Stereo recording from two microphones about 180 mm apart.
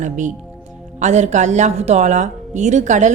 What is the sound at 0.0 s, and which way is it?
Speech, 45° right (ahead or behind).